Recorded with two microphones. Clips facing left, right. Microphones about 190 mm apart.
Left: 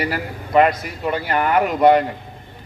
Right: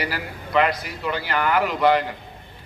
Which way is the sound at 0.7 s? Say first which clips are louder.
Left 3 dB; 25° left (ahead or behind).